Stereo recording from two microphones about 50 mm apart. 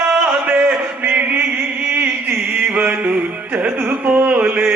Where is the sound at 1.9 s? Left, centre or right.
Right.